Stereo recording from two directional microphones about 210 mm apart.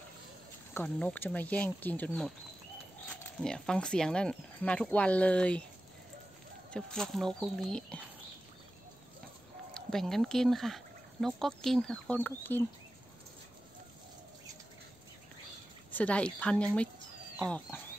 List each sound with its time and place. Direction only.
0.7 s speech: 5° left (ahead or behind)
3.4 s speech: 5° left (ahead or behind)
6.7 s speech: 5° left (ahead or behind)
9.8 s speech: centre (ahead or behind)
15.9 s speech: 5° left (ahead or behind)